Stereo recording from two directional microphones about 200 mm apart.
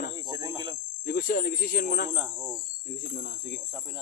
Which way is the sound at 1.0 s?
45° left (ahead or behind).